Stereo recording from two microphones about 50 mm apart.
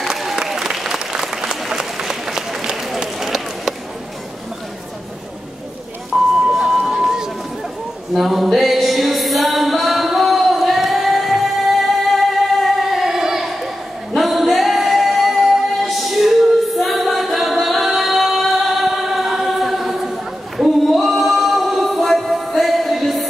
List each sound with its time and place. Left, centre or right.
0.0 s applause: centre
6.4 s a sound: centre
8.5 s music: centre
14.1 s singing: centre